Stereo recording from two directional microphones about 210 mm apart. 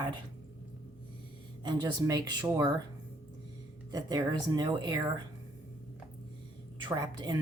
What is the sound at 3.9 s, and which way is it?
Speech, 20° right (ahead or behind).